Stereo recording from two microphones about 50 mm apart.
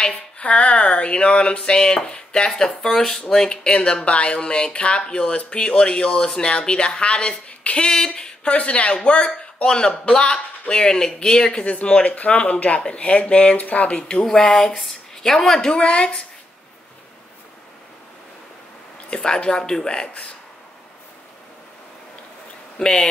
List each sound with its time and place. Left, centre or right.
0.0 s a sound: centre
10.7 s speech: centre
12.2 s a sound: left
14.2 s speech: centre
19.0 s speech: centre
22.8 s speech: centre